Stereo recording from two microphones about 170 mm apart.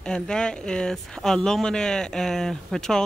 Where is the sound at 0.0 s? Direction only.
5° left (ahead or behind).